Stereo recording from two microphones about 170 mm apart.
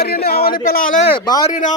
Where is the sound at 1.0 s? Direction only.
25° left (ahead or behind).